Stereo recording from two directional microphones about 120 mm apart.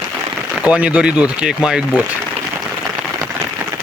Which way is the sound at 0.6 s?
10° right (ahead or behind).